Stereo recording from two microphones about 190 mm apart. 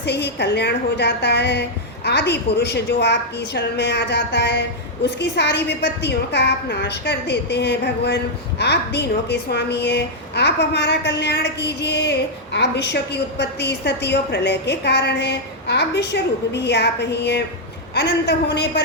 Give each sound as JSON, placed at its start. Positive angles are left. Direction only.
{"t": 0.0, "sound": "a woman's voice", "side_deg": 60}